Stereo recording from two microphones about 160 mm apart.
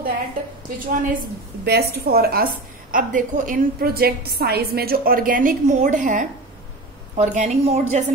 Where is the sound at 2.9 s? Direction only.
55° right (ahead or behind).